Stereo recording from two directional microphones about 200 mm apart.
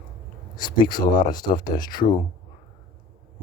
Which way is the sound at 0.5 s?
20° left (ahead or behind).